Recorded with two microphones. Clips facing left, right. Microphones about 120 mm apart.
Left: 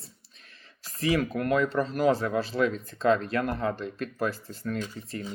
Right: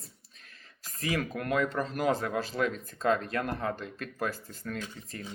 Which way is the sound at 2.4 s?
45° right (ahead or behind).